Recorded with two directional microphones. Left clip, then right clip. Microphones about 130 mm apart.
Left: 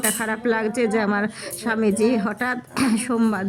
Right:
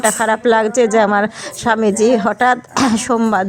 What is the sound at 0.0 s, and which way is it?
A woman's voice, 35° right (ahead or behind).